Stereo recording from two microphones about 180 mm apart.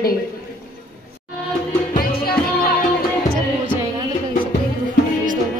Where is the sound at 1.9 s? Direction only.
55° left (ahead or behind).